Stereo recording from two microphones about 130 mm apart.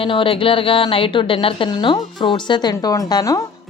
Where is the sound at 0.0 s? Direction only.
45° left (ahead or behind).